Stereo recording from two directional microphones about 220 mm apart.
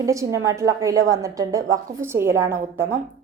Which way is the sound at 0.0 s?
15° right (ahead or behind).